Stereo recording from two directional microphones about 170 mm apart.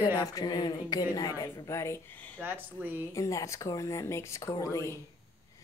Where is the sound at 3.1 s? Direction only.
20° left (ahead or behind).